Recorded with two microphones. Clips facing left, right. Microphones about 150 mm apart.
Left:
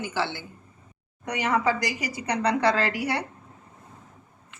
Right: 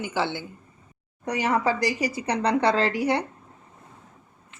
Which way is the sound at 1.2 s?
35° right (ahead or behind).